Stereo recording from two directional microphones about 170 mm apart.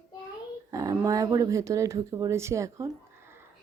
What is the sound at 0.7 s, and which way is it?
A child's voice, 20° right (ahead or behind).